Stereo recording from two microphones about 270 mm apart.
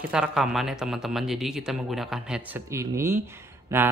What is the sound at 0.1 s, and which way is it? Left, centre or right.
Speech, centre.